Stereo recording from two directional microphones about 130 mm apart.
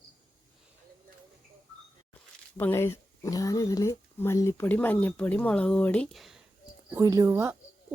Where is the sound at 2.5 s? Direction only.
20° left (ahead or behind).